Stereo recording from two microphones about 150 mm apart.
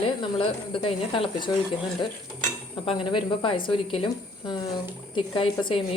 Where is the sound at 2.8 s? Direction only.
35° left (ahead or behind).